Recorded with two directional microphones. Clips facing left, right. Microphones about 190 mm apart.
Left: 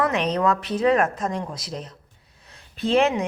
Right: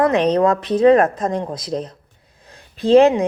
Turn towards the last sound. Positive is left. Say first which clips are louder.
# right 8 dB
turn(degrees=-35)  # may be behind; listen again after turning